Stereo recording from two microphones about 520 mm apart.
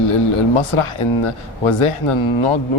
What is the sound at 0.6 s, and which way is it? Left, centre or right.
Speech, left.